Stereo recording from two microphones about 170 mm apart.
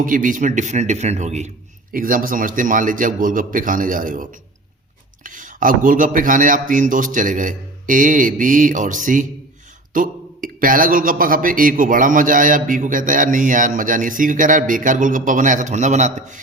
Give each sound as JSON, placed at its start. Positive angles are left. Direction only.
{"t": 0.0, "sound": "speech", "side_deg": -50}
{"t": 1.9, "sound": "speech", "side_deg": -55}